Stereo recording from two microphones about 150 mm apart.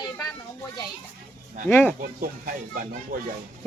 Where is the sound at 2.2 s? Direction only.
65° right (ahead or behind).